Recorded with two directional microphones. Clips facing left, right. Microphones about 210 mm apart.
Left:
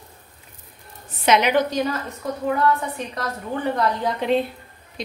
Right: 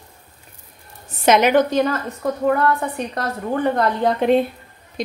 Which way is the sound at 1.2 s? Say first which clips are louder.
Right 4 dB; 45° right (ahead or behind).